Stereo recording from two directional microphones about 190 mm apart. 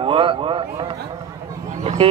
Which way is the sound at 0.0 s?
30° right (ahead or behind).